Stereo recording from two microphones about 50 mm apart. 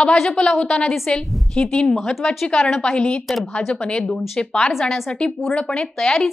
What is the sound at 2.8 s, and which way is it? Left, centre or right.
Speech, centre.